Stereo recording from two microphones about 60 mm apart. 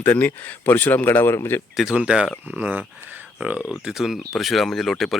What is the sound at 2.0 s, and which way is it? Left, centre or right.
Speech, centre.